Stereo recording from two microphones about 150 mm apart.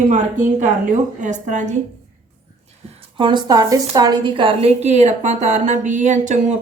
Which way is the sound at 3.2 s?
30° right (ahead or behind).